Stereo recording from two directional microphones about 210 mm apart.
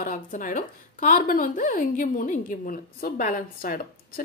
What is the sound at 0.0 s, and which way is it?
A woman's voice, 40° left (ahead or behind).